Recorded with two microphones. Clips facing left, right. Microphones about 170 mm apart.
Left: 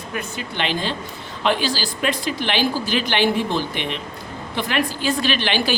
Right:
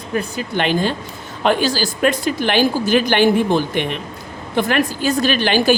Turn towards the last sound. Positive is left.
turn(degrees=-45)  # may be behind; listen again after turning